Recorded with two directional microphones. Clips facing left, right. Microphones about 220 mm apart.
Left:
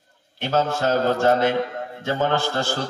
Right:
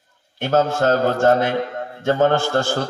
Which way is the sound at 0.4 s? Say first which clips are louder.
Right 4 dB; 50° right (ahead or behind).